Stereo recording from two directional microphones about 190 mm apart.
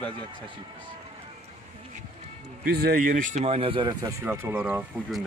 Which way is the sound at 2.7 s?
55° right (ahead or behind).